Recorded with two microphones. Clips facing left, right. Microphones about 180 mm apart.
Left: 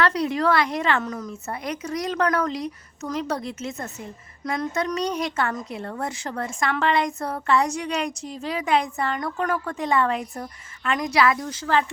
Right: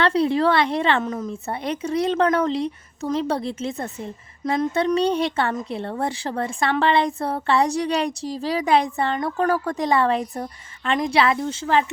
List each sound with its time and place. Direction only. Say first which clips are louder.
0.0 s a woman's voice: right 3 dB; 30° right (ahead or behind)